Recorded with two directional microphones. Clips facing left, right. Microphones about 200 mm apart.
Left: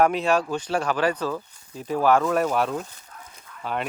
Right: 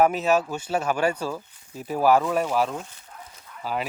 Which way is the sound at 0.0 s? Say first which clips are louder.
Even; 5° right (ahead or behind).